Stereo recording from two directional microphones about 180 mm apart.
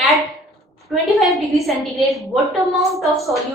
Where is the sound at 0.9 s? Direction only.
Centre (ahead or behind).